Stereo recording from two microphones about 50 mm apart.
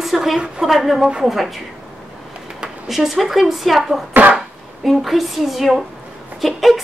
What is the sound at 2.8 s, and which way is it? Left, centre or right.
A woman's voice, centre.